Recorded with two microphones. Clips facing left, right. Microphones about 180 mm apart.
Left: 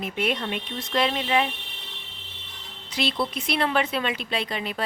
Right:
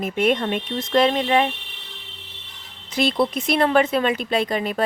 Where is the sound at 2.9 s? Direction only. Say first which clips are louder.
Right 6 dB; 50° right (ahead or behind).